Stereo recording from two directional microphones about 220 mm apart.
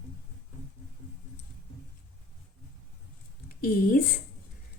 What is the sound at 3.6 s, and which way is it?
Speech, 40° left (ahead or behind).